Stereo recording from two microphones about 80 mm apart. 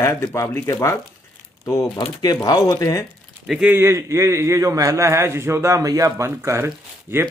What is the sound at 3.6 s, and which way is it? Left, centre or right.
A man's voice, right.